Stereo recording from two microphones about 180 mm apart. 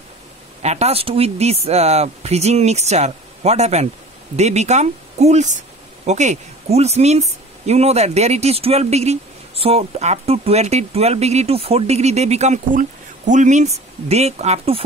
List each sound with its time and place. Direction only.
0.6 s speech: 40° right (ahead or behind)